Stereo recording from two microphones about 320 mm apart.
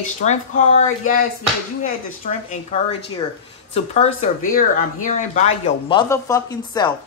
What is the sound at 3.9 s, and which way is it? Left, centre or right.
Speech, left.